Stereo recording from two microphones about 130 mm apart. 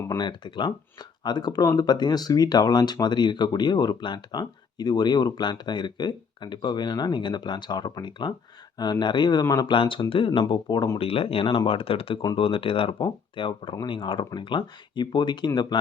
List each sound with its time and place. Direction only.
0.2 s speech: 35° left (ahead or behind)
9.6 s speech: 40° left (ahead or behind)
10.9 s speech: 45° left (ahead or behind)